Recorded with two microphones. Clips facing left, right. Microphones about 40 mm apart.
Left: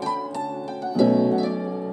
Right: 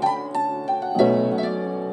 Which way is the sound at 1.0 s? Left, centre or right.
Right.